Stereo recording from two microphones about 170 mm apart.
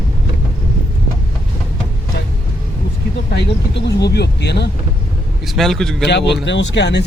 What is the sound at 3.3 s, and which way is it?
Speech, 80° left.